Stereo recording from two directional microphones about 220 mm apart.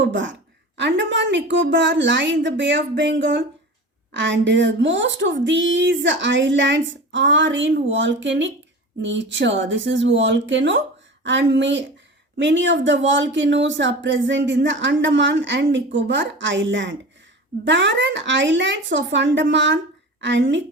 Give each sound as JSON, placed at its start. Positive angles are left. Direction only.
{"t": 0.0, "sound": "speech", "side_deg": -55}